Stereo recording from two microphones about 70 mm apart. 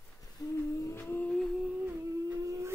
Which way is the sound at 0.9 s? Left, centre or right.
Left.